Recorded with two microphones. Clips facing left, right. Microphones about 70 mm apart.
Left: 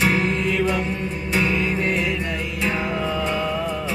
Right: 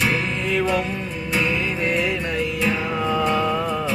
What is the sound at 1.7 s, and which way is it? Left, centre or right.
Music, left.